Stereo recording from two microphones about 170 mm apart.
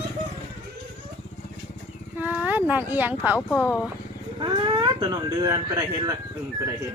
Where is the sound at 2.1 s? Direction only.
10° right (ahead or behind).